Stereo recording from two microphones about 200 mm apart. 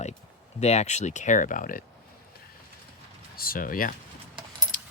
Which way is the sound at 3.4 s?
45° left (ahead or behind).